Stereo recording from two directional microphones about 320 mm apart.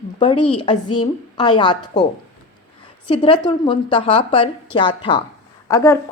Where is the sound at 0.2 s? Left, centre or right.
Centre.